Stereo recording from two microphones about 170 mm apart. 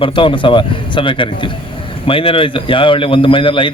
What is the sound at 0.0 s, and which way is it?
A man's voice, 30° left (ahead or behind).